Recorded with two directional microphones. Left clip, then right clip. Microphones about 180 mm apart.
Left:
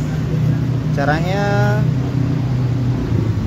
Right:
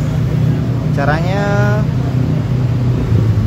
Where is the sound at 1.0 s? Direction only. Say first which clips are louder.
Right 1 dB; centre (ahead or behind).